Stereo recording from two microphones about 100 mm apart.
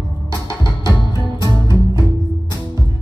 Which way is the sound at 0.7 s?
40° left (ahead or behind).